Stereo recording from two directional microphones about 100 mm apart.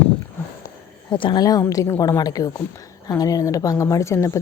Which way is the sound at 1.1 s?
55° left (ahead or behind).